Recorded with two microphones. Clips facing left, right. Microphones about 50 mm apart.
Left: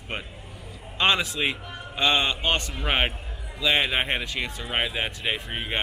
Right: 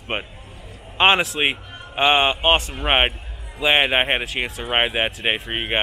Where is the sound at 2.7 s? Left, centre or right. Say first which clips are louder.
Right 6 dB; right.